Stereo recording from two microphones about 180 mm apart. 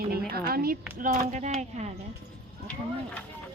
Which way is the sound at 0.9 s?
45° right (ahead or behind).